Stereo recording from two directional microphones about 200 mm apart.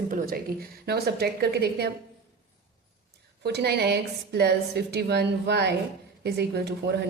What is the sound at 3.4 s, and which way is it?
A woman's voice, 55° right (ahead or behind).